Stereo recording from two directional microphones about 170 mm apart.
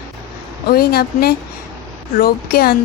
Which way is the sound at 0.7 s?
65° left (ahead or behind).